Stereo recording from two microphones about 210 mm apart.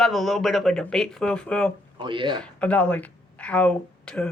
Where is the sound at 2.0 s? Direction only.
25° right (ahead or behind).